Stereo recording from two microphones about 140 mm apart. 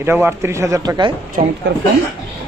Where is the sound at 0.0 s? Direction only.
15° right (ahead or behind).